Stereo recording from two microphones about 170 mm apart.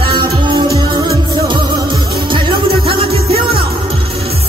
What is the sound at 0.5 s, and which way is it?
Music, 25° right (ahead or behind).